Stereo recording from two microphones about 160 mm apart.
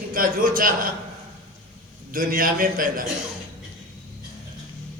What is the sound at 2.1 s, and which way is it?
Speech, 60° right (ahead or behind).